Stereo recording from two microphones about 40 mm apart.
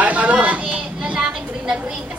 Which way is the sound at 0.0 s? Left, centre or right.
Right.